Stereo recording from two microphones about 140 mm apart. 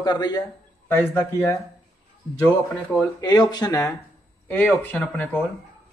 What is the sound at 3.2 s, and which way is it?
Speech, 30° left (ahead or behind).